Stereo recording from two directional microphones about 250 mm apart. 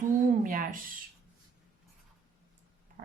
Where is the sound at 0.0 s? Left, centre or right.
Right.